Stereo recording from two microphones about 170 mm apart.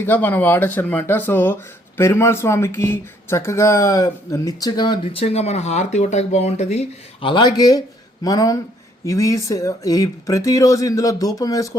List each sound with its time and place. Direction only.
0.0 s speech: 10° left (ahead or behind)